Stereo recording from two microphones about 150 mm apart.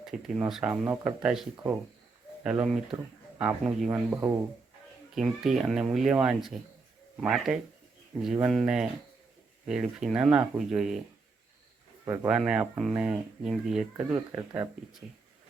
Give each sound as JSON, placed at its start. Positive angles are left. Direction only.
{"t": 0.0, "sound": "speech", "side_deg": -5}
{"t": 3.8, "sound": "speech", "side_deg": -15}
{"t": 5.1, "sound": "speech", "side_deg": 0}
{"t": 12.0, "sound": "speech", "side_deg": -15}
{"t": 14.0, "sound": "speech", "side_deg": -15}